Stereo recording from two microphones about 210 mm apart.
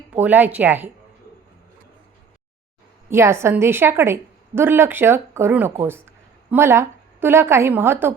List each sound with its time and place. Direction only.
0.1 s speech: 10° right (ahead or behind)
3.1 s a woman's voice: 10° right (ahead or behind)